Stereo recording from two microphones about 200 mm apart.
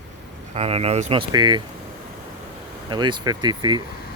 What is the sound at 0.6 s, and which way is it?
Speech, 30° right (ahead or behind).